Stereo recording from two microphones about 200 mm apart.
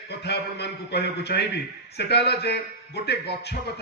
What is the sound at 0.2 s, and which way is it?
A man's voice, 55° left (ahead or behind).